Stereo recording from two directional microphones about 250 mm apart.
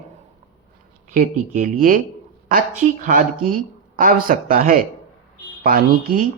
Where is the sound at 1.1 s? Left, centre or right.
Right.